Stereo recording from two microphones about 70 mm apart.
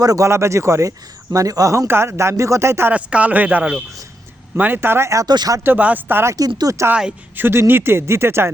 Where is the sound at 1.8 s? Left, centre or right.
Right.